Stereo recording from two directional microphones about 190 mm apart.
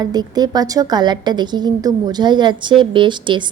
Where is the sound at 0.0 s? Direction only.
20° right (ahead or behind).